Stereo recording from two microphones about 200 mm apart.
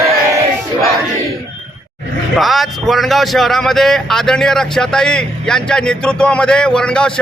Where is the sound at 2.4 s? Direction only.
Centre (ahead or behind).